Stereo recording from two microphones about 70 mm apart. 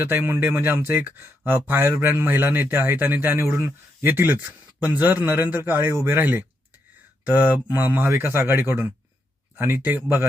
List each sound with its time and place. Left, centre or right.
0.0 s speech: right